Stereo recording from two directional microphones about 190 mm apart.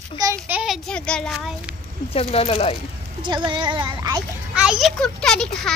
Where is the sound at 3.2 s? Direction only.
25° right (ahead or behind).